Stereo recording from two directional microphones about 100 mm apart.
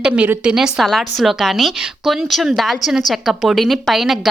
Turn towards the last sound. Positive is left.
turn(degrees=0)  # may be behind; listen again after turning